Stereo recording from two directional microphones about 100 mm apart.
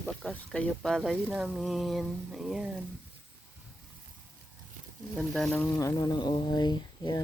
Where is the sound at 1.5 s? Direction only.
Centre (ahead or behind).